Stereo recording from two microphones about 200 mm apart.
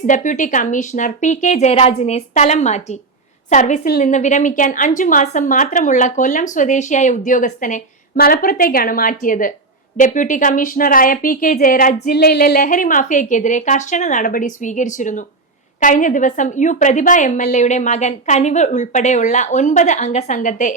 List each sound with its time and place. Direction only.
0.0 s a woman's voice: 40° left (ahead or behind)